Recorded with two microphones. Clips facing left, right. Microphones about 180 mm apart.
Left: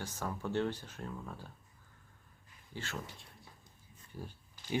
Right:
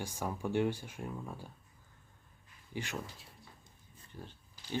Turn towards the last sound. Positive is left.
turn(degrees=10)  # may be behind; listen again after turning